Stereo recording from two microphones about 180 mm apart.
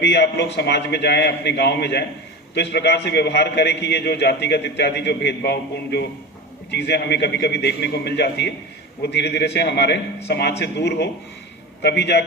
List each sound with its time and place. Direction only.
0.0 s a man's voice: 70° left (ahead or behind)